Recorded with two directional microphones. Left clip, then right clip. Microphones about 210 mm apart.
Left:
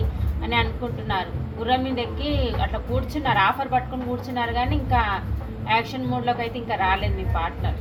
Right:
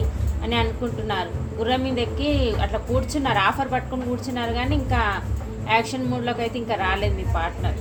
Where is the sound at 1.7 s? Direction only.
55° right (ahead or behind).